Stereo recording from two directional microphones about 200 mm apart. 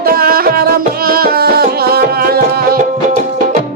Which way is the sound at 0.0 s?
50° right (ahead or behind).